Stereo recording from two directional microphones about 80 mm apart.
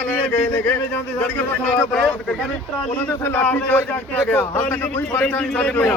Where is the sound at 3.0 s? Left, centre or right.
Left.